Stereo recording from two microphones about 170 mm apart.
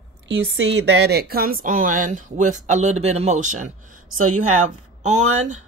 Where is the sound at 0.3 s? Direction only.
90° right; by 3.7 s 50° right (ahead or behind).